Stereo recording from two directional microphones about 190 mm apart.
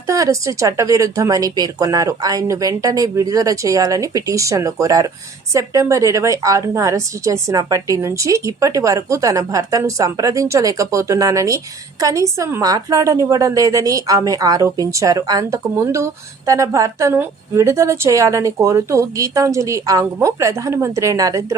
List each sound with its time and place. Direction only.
0.1 s a woman's voice: 15° right (ahead or behind)